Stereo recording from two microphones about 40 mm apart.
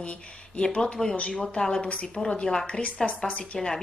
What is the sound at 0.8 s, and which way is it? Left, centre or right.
Speech, centre.